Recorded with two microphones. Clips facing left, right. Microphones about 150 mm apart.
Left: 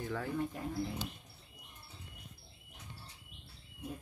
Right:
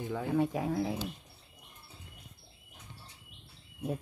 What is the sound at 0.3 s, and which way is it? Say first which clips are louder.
Speech: right 8 dB; 90° right.